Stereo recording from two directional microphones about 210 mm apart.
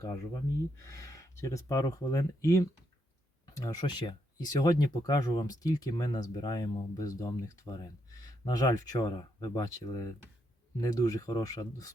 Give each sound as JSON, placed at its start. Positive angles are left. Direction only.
{"t": 0.0, "sound": "speech", "side_deg": 15}